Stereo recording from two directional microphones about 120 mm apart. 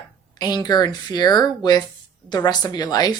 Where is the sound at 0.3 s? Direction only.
35° left (ahead or behind).